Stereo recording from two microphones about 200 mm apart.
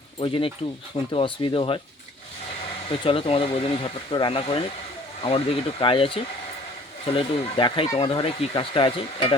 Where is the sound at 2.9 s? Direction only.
25° left (ahead or behind).